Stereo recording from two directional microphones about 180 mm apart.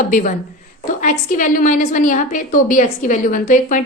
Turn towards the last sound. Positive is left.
turn(degrees=50)  # may be behind; listen again after turning